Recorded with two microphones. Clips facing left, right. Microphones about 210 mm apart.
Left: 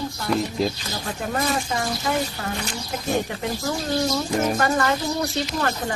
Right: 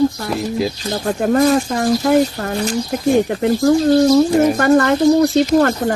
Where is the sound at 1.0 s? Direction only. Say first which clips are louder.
Right 12 dB; 50° right (ahead or behind).